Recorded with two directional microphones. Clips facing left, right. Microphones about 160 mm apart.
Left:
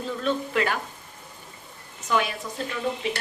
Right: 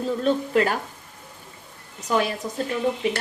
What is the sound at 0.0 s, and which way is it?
Speech, 40° right (ahead or behind).